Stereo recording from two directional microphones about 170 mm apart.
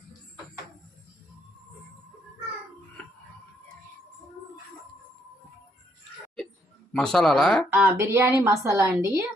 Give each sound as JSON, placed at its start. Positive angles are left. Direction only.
{"t": 6.9, "sound": "speech", "side_deg": 5}
{"t": 7.7, "sound": "a woman's voice", "side_deg": -15}